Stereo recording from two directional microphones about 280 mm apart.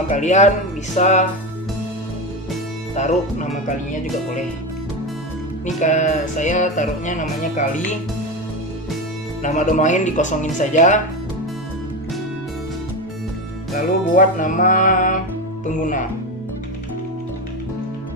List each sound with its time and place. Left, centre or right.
0.1 s music: left
2.9 s music: left
5.8 s music: left
9.4 s music: left
13.7 s music: left